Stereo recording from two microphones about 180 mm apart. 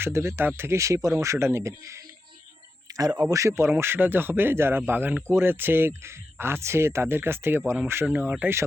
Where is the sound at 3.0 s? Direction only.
20° right (ahead or behind).